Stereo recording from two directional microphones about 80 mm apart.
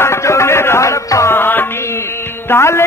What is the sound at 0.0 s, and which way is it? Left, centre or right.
Music, left.